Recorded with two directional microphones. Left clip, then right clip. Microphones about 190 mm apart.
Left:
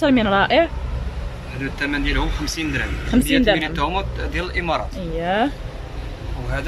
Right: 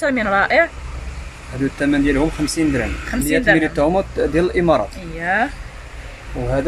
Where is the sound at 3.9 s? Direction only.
40° right (ahead or behind).